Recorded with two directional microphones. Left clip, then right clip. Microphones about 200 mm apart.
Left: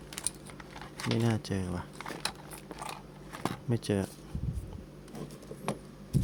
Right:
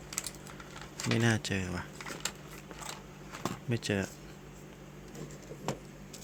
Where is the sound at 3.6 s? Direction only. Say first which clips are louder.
Left 1 dB; 15° left (ahead or behind).